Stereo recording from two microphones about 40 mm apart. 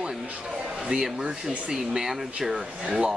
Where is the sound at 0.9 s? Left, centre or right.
Right.